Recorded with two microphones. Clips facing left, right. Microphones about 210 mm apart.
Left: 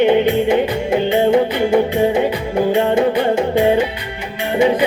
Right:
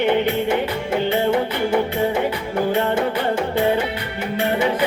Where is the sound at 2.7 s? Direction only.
20° left (ahead or behind).